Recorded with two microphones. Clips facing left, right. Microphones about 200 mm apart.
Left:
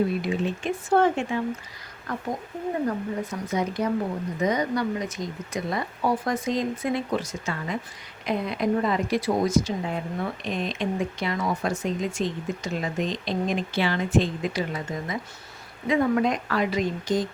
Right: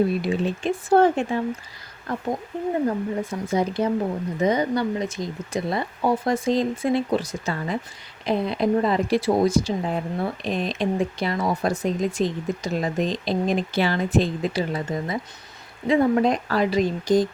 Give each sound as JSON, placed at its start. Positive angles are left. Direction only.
{"t": 0.2, "sound": "speech", "side_deg": -35}